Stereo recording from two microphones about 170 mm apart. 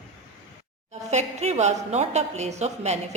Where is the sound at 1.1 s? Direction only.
40° right (ahead or behind).